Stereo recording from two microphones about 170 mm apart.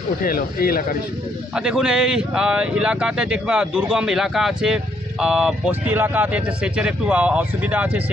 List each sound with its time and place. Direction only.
0.2 s speech: 60° left (ahead or behind)
1.5 s speech: 5° right (ahead or behind)